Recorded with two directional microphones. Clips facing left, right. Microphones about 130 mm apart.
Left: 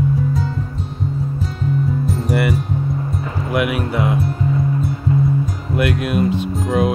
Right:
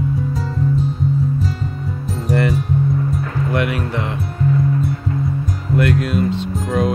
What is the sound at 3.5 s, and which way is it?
Speech, 10° left (ahead or behind).